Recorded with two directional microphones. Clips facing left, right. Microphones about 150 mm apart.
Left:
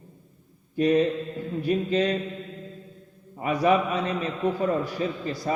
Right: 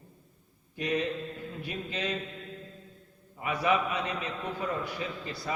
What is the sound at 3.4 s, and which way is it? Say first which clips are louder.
A man's voice: left 6 dB; 40° left (ahead or behind).